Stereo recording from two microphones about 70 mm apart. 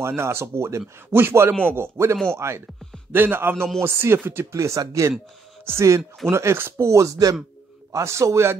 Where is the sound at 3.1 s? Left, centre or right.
Right.